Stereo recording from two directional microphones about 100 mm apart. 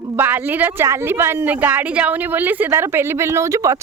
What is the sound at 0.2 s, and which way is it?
A woman's voice, 20° right (ahead or behind).